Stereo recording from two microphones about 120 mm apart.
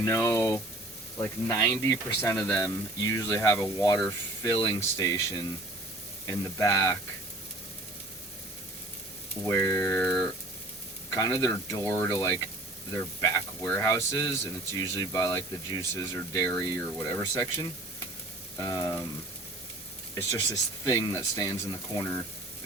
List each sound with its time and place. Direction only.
0.0 s speech: 25° left (ahead or behind)
2.3 s speech: 10° left (ahead or behind)
2.6 s speech: 25° left (ahead or behind)
4.8 s speech: 25° left (ahead or behind)
9.5 s speech: 20° left (ahead or behind)
10.0 s speech: 10° left (ahead or behind)
11.1 s speech: 30° left (ahead or behind)
16.5 s speech: 20° left (ahead or behind)
18.6 s speech: 30° left (ahead or behind)
20.1 s speech: 25° left (ahead or behind)